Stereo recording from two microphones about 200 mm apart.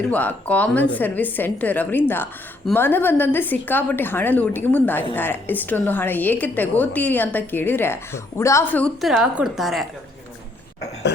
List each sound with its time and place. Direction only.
0.1 s a woman's voice: 10° left (ahead or behind)